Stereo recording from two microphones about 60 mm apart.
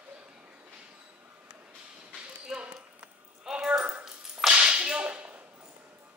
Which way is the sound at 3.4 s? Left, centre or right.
Centre.